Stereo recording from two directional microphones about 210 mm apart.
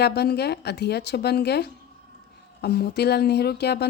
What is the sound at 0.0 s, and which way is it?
A woman's voice, 50° left (ahead or behind).